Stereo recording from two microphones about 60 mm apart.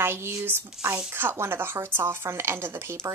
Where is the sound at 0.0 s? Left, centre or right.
Right.